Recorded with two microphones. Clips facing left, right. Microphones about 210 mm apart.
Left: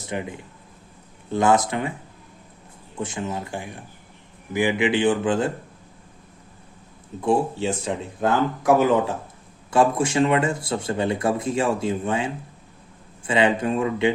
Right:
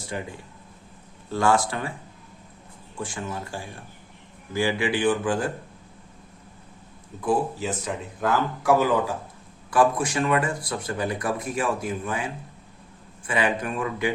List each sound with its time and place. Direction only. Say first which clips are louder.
0.0 s speech: left 3 dB; 20° left (ahead or behind)
3.0 s speech: left 4 dB; 20° left (ahead or behind)
7.2 s speech: left 3 dB; 25° left (ahead or behind)